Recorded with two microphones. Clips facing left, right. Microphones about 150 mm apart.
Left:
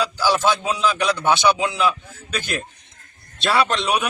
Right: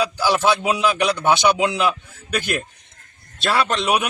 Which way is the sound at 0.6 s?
10° right (ahead or behind).